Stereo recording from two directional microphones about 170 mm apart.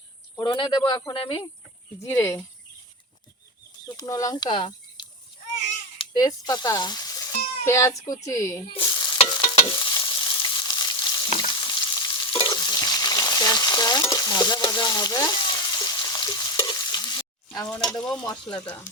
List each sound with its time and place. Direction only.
0.3 s speech: 25° left (ahead or behind)
2.0 s speech: 15° left (ahead or behind)
3.8 s speech: 20° left (ahead or behind)
8.7 s stir: 25° left (ahead or behind)
9.1 s frying: 25° left (ahead or behind)
11.3 s stir: 30° left (ahead or behind)
17.8 s stir: 5° left (ahead or behind)
18.3 s speech: 20° left (ahead or behind)